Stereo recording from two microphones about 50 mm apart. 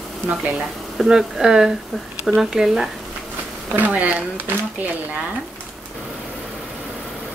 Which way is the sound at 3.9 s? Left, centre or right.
Right.